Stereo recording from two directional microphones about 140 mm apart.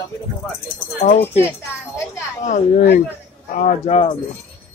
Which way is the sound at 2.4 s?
70° left (ahead or behind).